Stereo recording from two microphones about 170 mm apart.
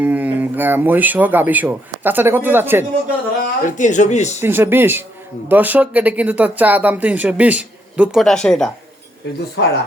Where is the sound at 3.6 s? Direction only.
45° left (ahead or behind).